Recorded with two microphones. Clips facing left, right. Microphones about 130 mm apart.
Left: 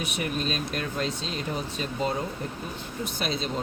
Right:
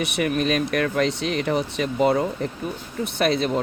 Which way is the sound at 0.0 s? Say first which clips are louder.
Right 7 dB; 70° right (ahead or behind).